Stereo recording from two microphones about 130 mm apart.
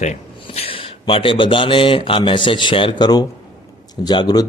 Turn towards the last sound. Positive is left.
turn(degrees=35)  # may be behind; listen again after turning